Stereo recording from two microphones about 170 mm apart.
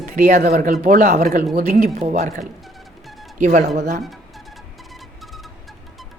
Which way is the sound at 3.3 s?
50° right (ahead or behind).